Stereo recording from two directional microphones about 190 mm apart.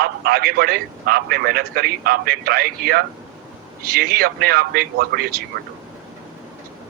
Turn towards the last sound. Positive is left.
turn(degrees=-55)  # may be behind; listen again after turning